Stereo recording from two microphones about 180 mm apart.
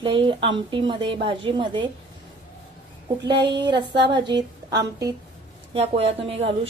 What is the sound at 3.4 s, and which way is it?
Speech, 25° right (ahead or behind).